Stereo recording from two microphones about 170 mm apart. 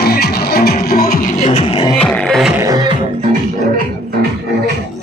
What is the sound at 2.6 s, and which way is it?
Beatboxing, 20° right (ahead or behind).